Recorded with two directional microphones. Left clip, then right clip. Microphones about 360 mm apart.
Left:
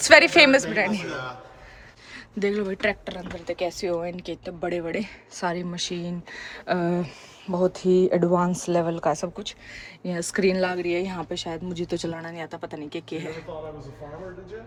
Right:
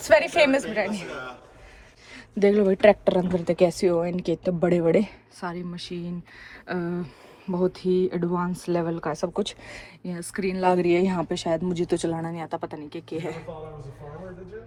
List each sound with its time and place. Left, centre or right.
0.1 s a woman's voice: centre
2.4 s speech: centre
5.4 s speech: centre
9.3 s speech: centre
10.0 s speech: centre
10.7 s speech: centre